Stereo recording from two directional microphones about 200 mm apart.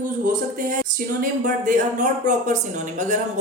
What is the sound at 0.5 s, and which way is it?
Speech, 45° right (ahead or behind).